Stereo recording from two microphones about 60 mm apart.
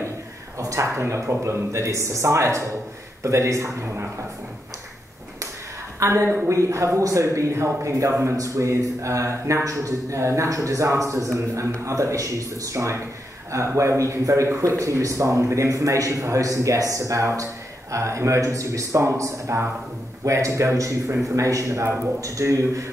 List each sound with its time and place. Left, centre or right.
0.6 s speech: right
5.9 s a woman's voice: right
6.2 s a woman's voice: right
6.5 s speech: right
8.4 s a man's voice: right